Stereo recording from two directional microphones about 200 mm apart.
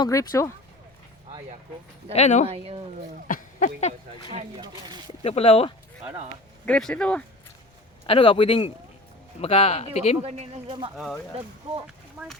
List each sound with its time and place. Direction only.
0.0 s speech: 15° left (ahead or behind)
2.1 s speech: 35° left (ahead or behind)
2.5 s speech: 30° right (ahead or behind)
3.2 s a sound: 40° left (ahead or behind)
4.3 s speech: 30° right (ahead or behind)
5.2 s speech: 30° left (ahead or behind)
6.7 s speech: 5° left (ahead or behind)
8.0 s speech: 25° left (ahead or behind)
10.2 s speech: 30° right (ahead or behind)
10.9 s speech: centre (ahead or behind)